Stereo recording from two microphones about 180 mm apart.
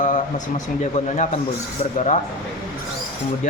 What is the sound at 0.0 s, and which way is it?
Speech, 45° left (ahead or behind).